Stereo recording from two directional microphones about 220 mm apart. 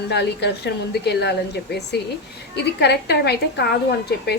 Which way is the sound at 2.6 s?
50° left (ahead or behind).